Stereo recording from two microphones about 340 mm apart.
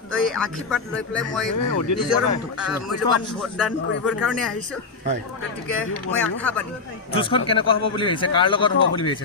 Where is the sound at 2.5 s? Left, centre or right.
Centre.